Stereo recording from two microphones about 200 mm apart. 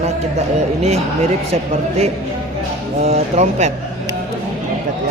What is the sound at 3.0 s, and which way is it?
Speech, 35° right (ahead or behind).